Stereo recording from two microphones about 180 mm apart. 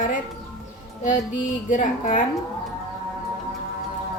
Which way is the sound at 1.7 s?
45° left (ahead or behind).